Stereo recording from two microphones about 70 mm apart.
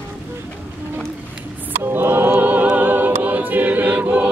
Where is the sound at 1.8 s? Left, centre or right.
Right.